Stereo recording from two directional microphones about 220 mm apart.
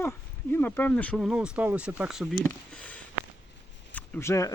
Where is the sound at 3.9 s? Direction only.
10° left (ahead or behind).